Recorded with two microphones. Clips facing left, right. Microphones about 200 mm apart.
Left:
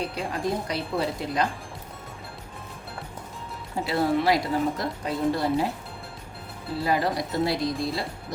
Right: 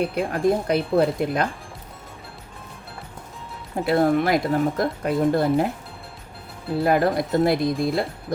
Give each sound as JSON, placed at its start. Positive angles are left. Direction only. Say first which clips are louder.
{"t": 0.0, "sound": "speech", "louder": "right 7 dB", "side_deg": -55}
{"t": 3.8, "sound": "speech", "louder": "right 4 dB", "side_deg": -50}
{"t": 6.7, "sound": "speech", "louder": "right 6 dB", "side_deg": -55}